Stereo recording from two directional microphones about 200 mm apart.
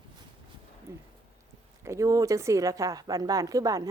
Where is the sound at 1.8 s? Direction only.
15° right (ahead or behind).